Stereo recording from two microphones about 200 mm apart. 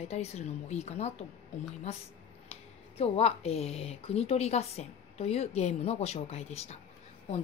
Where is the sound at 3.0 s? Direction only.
30° left (ahead or behind).